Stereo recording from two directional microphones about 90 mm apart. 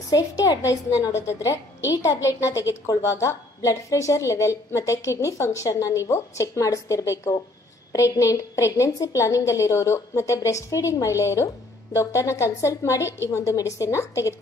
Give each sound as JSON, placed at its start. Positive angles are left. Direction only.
{"t": 0.7, "sound": "a woman's voice", "side_deg": 35}